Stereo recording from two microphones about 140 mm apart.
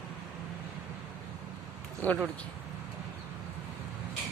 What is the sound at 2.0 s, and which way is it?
Speech, 15° left (ahead or behind).